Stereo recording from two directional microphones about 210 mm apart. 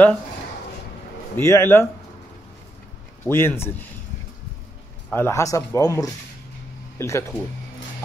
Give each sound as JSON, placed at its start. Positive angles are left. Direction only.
{"t": 1.3, "sound": "speech", "side_deg": 10}
{"t": 3.3, "sound": "speech", "side_deg": 10}
{"t": 5.1, "sound": "speech", "side_deg": 10}